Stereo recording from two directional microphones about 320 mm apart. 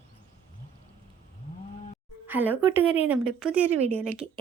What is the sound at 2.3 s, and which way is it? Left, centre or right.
A woman's voice, centre.